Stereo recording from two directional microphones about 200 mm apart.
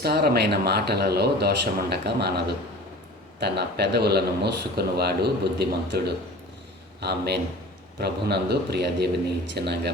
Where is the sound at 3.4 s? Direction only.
55° right (ahead or behind).